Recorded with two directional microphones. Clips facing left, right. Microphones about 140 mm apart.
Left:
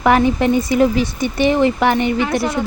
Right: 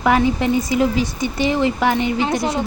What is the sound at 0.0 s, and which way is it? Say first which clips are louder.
Speech: left 3 dB; 55° left (ahead or behind).